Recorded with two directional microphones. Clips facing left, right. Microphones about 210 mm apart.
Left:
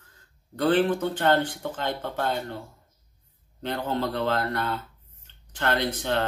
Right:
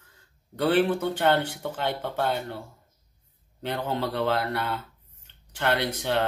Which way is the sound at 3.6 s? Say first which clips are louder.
Left 1 dB; 10° right (ahead or behind).